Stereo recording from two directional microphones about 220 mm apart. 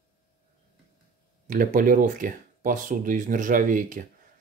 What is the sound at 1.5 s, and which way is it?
Speech, 35° right (ahead or behind).